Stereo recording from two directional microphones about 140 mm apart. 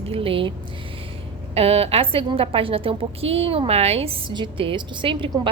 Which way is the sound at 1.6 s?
45° right (ahead or behind).